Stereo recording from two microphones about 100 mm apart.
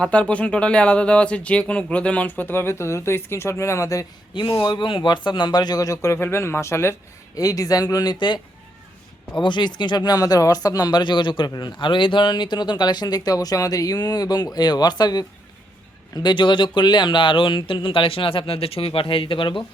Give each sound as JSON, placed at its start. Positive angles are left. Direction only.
{"t": 0.0, "sound": "speech", "side_deg": 10}
{"t": 4.6, "sound": "speech", "side_deg": 50}
{"t": 9.4, "sound": "speech", "side_deg": 50}